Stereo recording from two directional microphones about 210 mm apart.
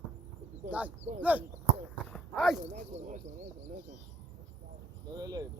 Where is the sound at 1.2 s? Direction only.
5° right (ahead or behind).